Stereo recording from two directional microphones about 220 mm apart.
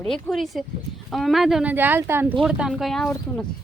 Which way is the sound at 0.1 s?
Centre (ahead or behind).